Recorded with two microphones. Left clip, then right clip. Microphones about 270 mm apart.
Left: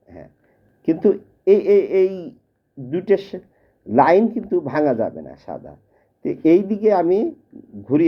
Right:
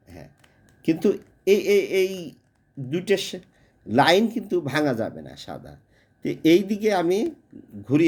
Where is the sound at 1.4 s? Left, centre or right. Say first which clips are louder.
Left 5 dB; right.